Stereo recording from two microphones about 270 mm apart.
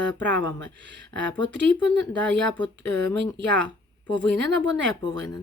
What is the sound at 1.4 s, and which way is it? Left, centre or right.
Speech, right.